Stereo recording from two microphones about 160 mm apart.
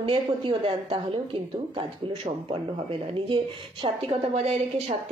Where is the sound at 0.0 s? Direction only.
35° right (ahead or behind).